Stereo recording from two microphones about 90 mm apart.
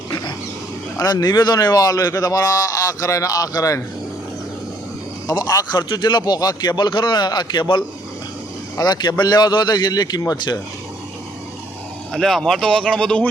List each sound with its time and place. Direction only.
0.9 s speech: 45° left (ahead or behind)
5.3 s speech: 45° left (ahead or behind)
12.1 s speech: 5° left (ahead or behind)